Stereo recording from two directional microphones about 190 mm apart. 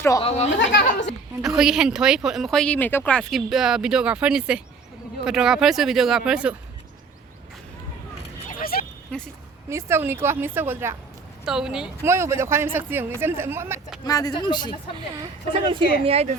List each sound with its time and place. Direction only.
0.2 s speech: 35° left (ahead or behind)
1.4 s speech: 5° right (ahead or behind)
8.4 s vehicle: 50° left (ahead or behind)
9.1 s speech: 5° left (ahead or behind)
9.6 s speech: 15° right (ahead or behind)
12.0 s speech: 15° right (ahead or behind)
14.0 s speech: 20° left (ahead or behind)
14.9 s a woman's voice: 25° right (ahead or behind)